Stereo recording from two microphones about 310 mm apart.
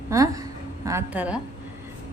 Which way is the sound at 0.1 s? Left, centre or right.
Centre.